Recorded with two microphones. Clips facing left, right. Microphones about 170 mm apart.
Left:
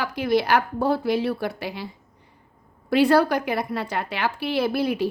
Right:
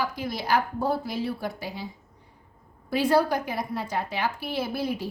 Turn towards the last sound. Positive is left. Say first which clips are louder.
# left 6 dB
turn(degrees=70)  # may be behind; listen again after turning